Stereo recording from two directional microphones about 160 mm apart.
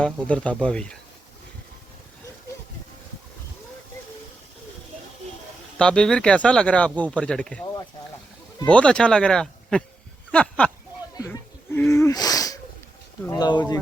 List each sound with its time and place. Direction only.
0.0 s speech: 10° left (ahead or behind)
5.8 s speech: 5° left (ahead or behind)
8.6 s speech: 5° left (ahead or behind); by 13.6 s 25° left (ahead or behind)